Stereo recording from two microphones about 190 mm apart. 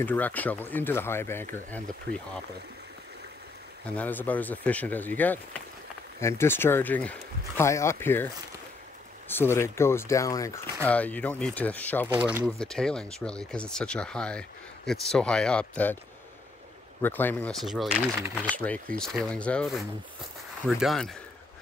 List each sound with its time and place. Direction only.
0.0 s speech: 10° left (ahead or behind)
2.1 s speech: 60° right (ahead or behind)
3.9 s speech: 10° left (ahead or behind)
9.3 s speech: 15° left (ahead or behind)
12.1 s speech: 10° right (ahead or behind)
12.4 s speech: 5° left (ahead or behind)
17.0 s speech: 10° left (ahead or behind)